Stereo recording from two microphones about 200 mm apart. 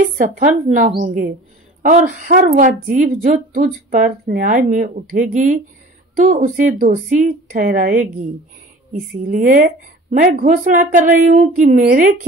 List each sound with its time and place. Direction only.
0.4 s speech: 40° right (ahead or behind)
9.3 s a woman's voice: 45° right (ahead or behind)